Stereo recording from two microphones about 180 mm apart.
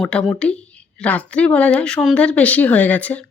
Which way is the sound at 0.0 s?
5° left (ahead or behind).